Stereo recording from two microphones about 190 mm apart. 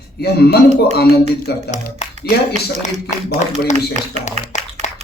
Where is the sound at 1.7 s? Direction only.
40° left (ahead or behind).